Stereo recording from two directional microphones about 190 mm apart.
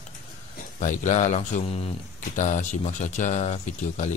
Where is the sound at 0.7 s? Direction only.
40° left (ahead or behind).